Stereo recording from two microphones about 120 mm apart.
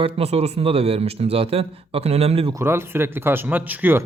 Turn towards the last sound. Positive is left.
turn(degrees=-15)  # may be behind; listen again after turning